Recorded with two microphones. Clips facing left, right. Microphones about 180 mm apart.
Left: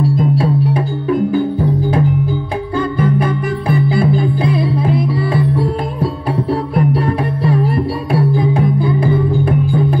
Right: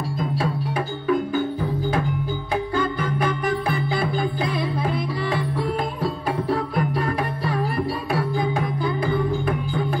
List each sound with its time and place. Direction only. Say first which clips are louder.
3.2 s music: left 5 dB; 30° left (ahead or behind)
6.7 s music: left 8 dB; 30° left (ahead or behind)